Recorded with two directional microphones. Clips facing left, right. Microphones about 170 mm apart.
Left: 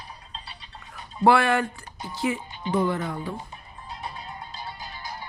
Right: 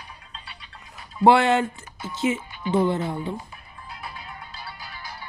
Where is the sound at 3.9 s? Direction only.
35° left (ahead or behind).